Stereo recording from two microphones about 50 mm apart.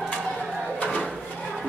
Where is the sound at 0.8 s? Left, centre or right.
Left.